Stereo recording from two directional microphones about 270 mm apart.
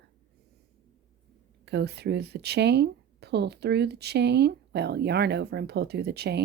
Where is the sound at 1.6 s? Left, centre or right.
Right.